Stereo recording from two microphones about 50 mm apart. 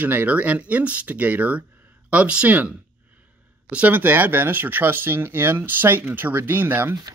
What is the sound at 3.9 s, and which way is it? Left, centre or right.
Speech, right.